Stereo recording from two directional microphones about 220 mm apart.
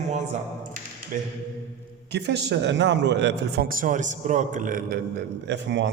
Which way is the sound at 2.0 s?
50° right (ahead or behind).